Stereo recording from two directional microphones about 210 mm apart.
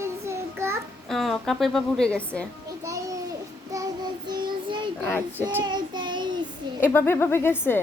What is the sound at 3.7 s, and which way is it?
Child singing, 20° right (ahead or behind).